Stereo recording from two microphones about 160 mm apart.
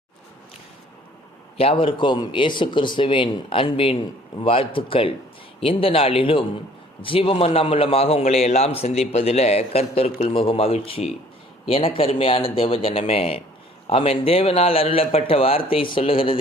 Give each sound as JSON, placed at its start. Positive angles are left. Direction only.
{"t": 1.5, "sound": "a man's voice", "side_deg": 35}